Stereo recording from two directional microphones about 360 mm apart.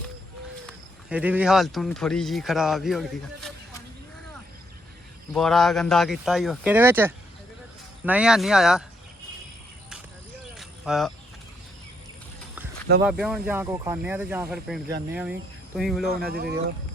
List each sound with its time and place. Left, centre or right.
1.1 s speech: centre
5.3 s speech: centre
10.6 s vehicle: centre
13.1 s speech: centre
16.0 s speech: right